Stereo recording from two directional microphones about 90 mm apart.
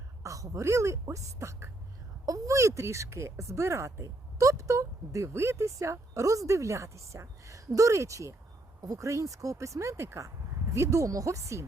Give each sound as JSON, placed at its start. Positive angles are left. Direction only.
{"t": 0.2, "sound": "speech", "side_deg": -35}